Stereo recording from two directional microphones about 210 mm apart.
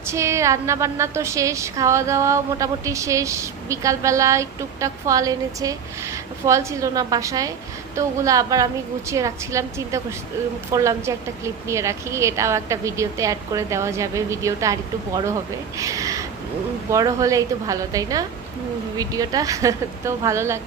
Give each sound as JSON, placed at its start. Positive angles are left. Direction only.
{"t": 0.0, "sound": "a woman's voice", "side_deg": -15}